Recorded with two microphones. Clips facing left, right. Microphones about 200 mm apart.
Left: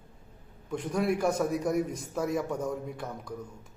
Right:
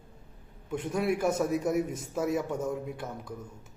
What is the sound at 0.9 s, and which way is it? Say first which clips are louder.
A man's voice: even; 5° right (ahead or behind).